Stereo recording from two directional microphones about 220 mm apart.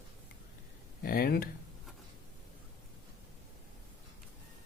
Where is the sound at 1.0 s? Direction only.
40° left (ahead or behind).